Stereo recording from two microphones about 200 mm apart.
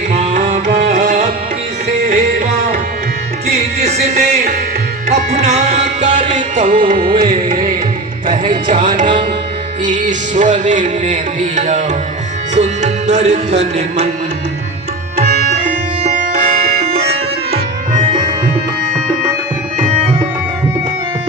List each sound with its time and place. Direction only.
0.1 s music: 35° right (ahead or behind)
3.8 s music: 35° right (ahead or behind)
9.8 s music: 40° right (ahead or behind)
15.2 s music: 40° right (ahead or behind)